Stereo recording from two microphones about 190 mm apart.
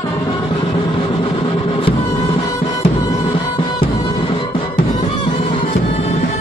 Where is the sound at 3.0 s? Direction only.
25° left (ahead or behind).